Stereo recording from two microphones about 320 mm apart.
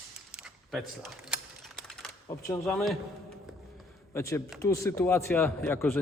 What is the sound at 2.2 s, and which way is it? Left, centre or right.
Speech, centre.